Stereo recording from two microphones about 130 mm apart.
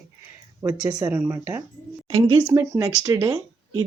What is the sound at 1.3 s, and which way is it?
Speech, 20° right (ahead or behind).